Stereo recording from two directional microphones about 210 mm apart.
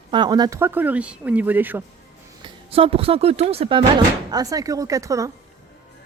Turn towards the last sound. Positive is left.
turn(degrees=-15)  # may be behind; listen again after turning